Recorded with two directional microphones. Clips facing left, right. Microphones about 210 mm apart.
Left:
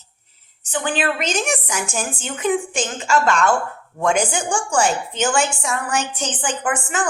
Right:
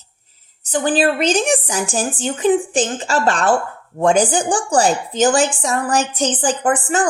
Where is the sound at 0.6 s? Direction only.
40° right (ahead or behind).